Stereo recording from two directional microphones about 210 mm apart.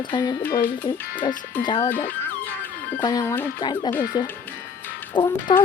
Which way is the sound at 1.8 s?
10° left (ahead or behind).